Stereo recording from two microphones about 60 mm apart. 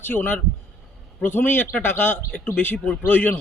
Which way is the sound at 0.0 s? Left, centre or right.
Left.